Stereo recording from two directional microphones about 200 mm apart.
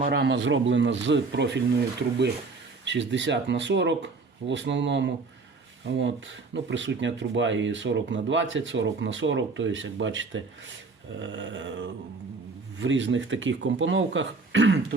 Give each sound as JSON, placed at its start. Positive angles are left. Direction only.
{"t": 0.0, "sound": "speech", "side_deg": -50}
{"t": 12.8, "sound": "speech", "side_deg": -65}